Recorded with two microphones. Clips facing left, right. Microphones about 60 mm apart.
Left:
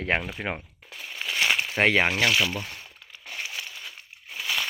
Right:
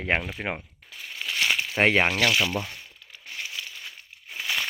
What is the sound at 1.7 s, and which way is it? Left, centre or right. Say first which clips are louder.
Speech: right 1 dB; centre.